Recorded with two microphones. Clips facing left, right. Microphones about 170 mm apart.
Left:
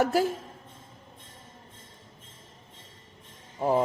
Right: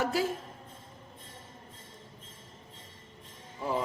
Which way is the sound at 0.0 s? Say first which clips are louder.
Left 5 dB; 45° left (ahead or behind).